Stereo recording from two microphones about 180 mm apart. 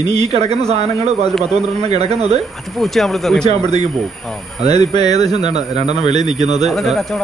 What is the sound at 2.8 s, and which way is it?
Speech, centre (ahead or behind).